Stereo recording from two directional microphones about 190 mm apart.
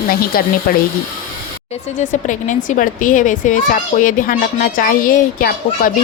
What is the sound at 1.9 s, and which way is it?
Speech, 40° left (ahead or behind).